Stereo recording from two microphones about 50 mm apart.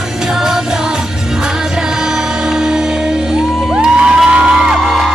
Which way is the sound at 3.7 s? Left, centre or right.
Centre.